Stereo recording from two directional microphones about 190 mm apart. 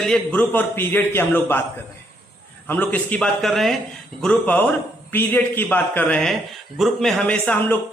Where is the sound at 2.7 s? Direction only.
10° left (ahead or behind).